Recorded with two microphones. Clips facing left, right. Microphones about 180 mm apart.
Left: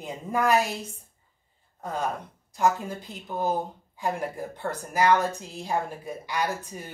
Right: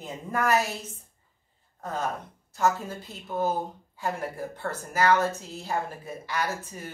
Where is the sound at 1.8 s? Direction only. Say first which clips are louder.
Left 1 dB; 10° left (ahead or behind).